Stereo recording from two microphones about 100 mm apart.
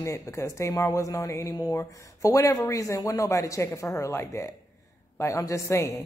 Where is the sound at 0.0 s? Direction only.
30° left (ahead or behind).